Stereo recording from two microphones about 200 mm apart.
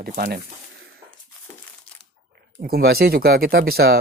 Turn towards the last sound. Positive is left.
turn(degrees=-50)  # may be behind; listen again after turning